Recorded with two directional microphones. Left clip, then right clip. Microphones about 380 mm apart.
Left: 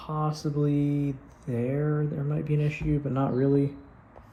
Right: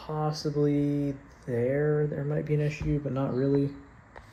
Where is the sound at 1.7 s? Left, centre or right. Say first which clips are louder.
Right 4 dB; left.